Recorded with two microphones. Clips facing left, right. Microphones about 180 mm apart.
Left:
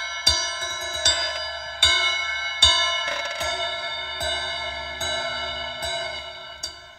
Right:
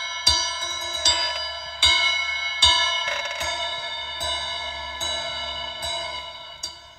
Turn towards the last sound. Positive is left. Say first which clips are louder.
# left 2 dB
turn(degrees=60)  # may be behind; listen again after turning